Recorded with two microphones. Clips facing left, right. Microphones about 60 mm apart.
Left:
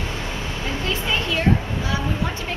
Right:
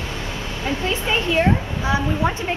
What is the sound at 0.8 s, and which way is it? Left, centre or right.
Speech, right.